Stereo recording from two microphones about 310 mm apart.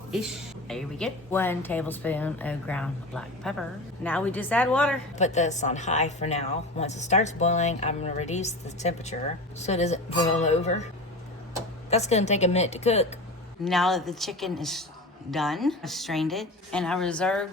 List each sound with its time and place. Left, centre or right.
0.1 s a woman's voice: centre
5.1 s a woman's voice: left
11.9 s a woman's voice: left
13.7 s a woman's voice: centre